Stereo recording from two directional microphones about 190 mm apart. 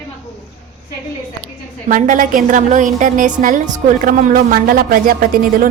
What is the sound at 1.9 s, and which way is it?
A woman's voice, 45° right (ahead or behind).